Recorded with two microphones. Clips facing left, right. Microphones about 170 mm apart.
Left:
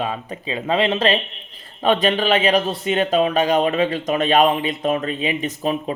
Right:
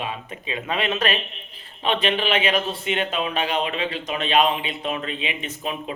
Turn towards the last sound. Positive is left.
turn(degrees=40)  # may be behind; listen again after turning